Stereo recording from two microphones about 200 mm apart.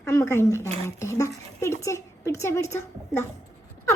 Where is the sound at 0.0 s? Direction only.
15° left (ahead or behind).